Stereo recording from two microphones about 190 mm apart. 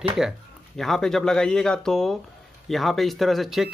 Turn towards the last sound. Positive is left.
turn(degrees=0)  # may be behind; listen again after turning